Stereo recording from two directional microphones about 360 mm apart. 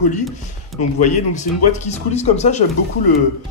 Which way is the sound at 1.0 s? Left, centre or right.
Centre.